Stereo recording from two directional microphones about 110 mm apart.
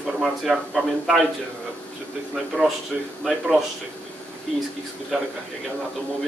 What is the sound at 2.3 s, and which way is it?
Speech, centre (ahead or behind).